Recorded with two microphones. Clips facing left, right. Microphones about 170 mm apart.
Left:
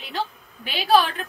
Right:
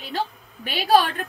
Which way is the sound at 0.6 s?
50° right (ahead or behind).